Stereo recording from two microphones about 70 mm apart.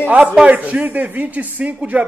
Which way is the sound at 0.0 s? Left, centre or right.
Centre.